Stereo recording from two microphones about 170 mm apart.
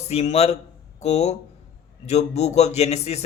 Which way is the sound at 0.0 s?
40° left (ahead or behind).